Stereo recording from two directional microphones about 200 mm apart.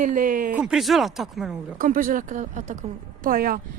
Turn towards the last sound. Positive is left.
turn(degrees=-45)  # may be behind; listen again after turning